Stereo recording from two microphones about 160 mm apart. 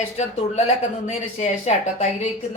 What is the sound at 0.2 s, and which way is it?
Speech, 40° left (ahead or behind).